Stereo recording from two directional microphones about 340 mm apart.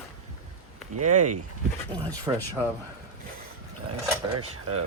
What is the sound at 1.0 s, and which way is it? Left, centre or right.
Speech, right.